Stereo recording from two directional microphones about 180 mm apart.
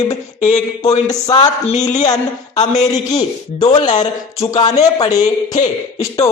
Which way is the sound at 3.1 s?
20° left (ahead or behind).